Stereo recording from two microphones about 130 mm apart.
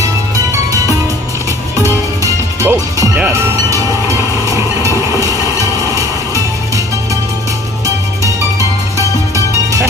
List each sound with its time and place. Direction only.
2.2 s music: 25° right (ahead or behind)
3.7 s train: 25° right (ahead or behind)
5.9 s music: 25° right (ahead or behind)
7.8 s music: 25° right (ahead or behind)